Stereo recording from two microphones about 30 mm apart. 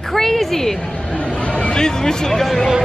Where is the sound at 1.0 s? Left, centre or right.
Left.